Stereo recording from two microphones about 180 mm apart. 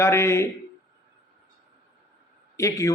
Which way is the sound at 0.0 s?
15° left (ahead or behind).